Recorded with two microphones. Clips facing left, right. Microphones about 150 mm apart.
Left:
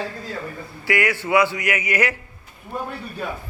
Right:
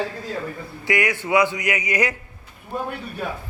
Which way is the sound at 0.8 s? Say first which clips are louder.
Left 1 dB; 20° right (ahead or behind).